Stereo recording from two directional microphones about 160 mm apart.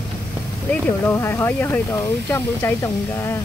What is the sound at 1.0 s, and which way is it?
Speech, 15° left (ahead or behind).